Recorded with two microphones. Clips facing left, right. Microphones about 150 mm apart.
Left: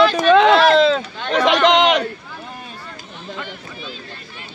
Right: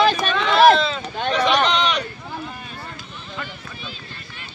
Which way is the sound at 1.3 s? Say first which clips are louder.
Left 5 dB; 90° left.